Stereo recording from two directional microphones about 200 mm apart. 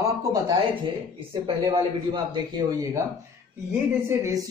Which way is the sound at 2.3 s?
20° right (ahead or behind).